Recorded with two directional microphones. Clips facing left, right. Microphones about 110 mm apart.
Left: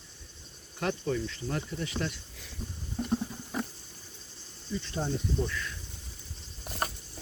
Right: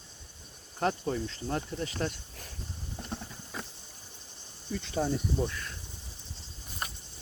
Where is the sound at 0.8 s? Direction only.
35° right (ahead or behind).